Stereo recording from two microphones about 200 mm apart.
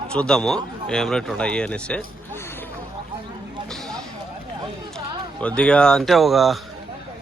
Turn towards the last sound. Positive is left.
turn(degrees=0)  # may be behind; listen again after turning